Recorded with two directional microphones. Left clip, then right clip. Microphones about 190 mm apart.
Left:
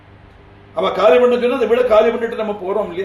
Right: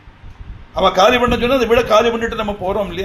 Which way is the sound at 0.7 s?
30° right (ahead or behind).